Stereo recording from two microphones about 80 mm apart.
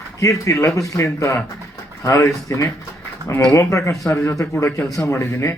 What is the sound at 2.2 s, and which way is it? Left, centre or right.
A man's voice, left.